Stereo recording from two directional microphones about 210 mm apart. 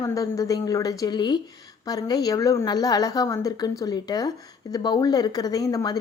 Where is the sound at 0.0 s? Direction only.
15° left (ahead or behind).